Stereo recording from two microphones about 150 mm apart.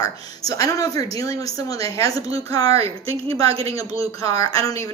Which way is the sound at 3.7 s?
20° left (ahead or behind).